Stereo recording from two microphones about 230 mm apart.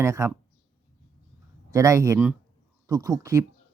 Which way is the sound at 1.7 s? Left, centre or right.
Centre.